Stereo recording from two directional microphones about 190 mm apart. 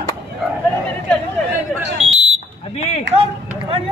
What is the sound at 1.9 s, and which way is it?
Smoke detector, 90° right.